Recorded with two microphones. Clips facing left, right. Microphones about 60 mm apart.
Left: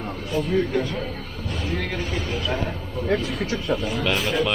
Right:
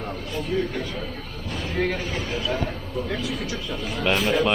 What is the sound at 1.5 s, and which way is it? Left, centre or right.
Music, centre.